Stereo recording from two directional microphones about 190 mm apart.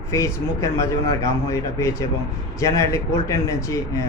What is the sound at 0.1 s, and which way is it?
Speech, 15° left (ahead or behind).